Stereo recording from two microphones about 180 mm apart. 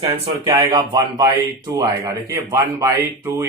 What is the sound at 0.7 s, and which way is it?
Speech, 25° right (ahead or behind).